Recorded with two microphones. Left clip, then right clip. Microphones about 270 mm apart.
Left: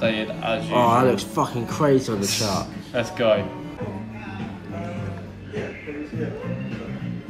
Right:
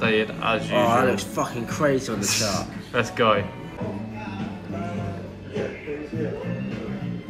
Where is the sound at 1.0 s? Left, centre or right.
Left.